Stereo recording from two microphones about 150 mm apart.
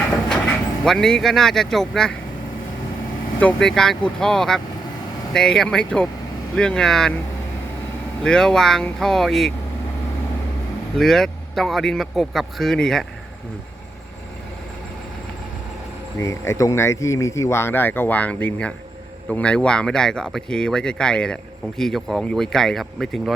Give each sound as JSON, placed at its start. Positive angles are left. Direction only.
{"t": 0.3, "sound": "speech", "side_deg": 5}
{"t": 3.4, "sound": "speech", "side_deg": 5}
{"t": 8.2, "sound": "speech", "side_deg": 5}
{"t": 10.9, "sound": "speech", "side_deg": 0}
{"t": 16.2, "sound": "speech", "side_deg": 20}